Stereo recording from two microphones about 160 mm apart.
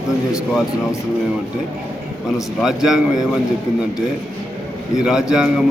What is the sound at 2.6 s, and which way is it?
Speech, 5° right (ahead or behind).